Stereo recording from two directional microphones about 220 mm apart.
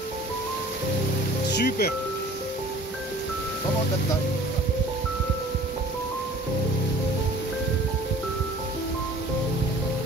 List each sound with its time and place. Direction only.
1.5 s music: 45° left (ahead or behind)